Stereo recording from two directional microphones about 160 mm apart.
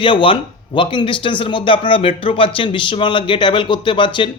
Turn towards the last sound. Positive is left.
turn(degrees=30)  # may be behind; listen again after turning